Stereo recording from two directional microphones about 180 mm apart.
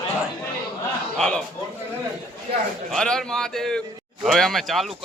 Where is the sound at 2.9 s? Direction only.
5° left (ahead or behind).